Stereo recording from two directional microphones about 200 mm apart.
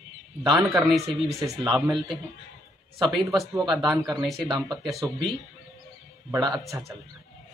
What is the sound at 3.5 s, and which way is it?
A man's voice, 20° right (ahead or behind).